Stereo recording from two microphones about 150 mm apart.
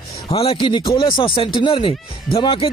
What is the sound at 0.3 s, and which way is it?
Speech, 35° left (ahead or behind).